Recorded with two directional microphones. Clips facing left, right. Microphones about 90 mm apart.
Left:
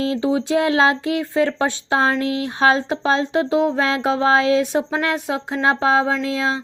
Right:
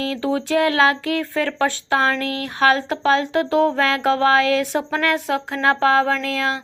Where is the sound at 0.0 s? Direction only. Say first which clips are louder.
Left 2 dB; 25° left (ahead or behind).